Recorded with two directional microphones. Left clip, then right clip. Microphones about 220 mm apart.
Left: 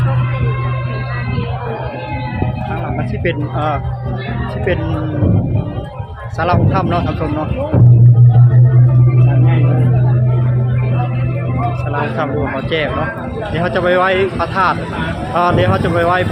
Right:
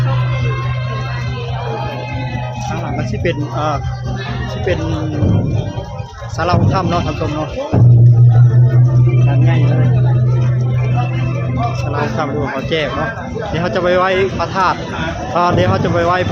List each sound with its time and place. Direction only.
3.2 s speech: 10° right (ahead or behind)
6.4 s speech: 5° right (ahead or behind)
13.5 s speech: 10° right (ahead or behind)